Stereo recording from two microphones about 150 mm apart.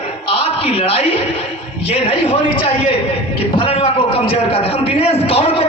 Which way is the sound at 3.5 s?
35° left (ahead or behind).